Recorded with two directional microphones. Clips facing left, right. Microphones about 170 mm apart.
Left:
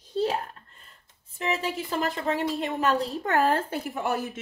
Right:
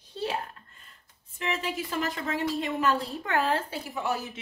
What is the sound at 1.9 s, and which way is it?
A woman's voice, 40° left (ahead or behind).